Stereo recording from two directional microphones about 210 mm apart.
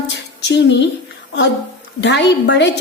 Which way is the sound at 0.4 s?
55° left (ahead or behind).